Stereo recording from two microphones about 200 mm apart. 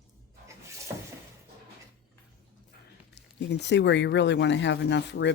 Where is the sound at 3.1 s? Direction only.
60° left (ahead or behind).